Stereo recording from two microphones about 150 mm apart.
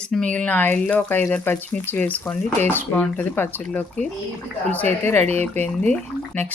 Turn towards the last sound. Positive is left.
turn(degrees=10)  # may be behind; listen again after turning